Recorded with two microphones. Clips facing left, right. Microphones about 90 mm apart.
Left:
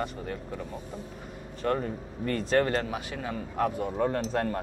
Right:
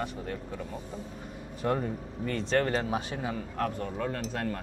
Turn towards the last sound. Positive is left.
turn(degrees=35)  # may be behind; listen again after turning